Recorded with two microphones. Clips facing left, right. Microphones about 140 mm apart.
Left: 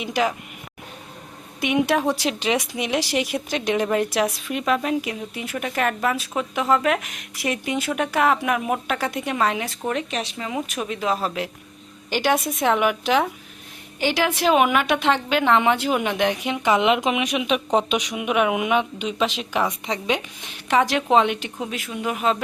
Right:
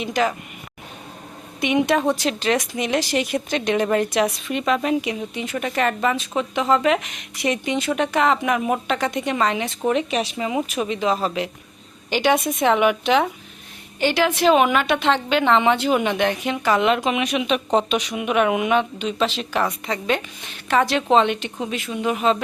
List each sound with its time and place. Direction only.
0.0 s a woman's voice: 10° left (ahead or behind)
1.6 s a woman's voice: 5° left (ahead or behind)
9.8 s speech: 5° right (ahead or behind)
10.7 s a woman's voice: centre (ahead or behind)